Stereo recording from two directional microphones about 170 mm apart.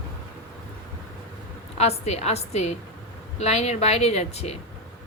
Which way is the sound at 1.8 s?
40° left (ahead or behind).